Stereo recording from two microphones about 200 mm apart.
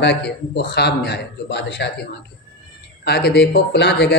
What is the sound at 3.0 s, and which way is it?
A man's voice, 55° left (ahead or behind).